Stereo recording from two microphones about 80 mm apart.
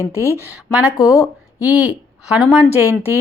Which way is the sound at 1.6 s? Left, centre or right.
Centre.